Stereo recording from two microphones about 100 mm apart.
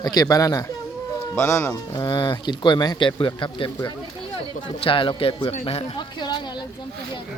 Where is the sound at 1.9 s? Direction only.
50° left (ahead or behind).